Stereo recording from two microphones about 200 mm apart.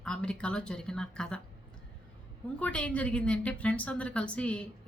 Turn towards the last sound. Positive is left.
turn(degrees=5)  # may be behind; listen again after turning